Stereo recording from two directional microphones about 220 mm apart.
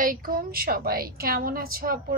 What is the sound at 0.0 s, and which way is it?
A woman's voice, 40° right (ahead or behind).